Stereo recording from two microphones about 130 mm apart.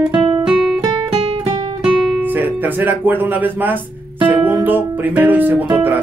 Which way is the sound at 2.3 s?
15° right (ahead or behind).